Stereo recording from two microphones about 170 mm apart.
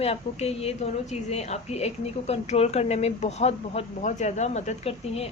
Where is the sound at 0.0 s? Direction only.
35° left (ahead or behind).